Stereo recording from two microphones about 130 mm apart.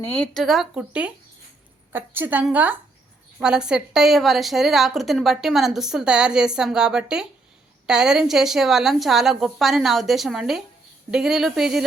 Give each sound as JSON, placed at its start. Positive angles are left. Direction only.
{"t": 0.3, "sound": "a woman's voice", "side_deg": 0}